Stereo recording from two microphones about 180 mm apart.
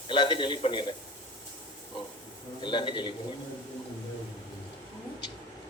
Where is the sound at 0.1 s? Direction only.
25° left (ahead or behind).